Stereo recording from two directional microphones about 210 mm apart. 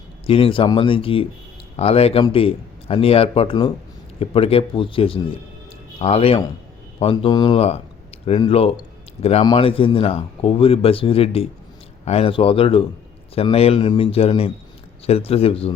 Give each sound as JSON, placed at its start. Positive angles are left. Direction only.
{"t": 0.3, "sound": "speech", "side_deg": 25}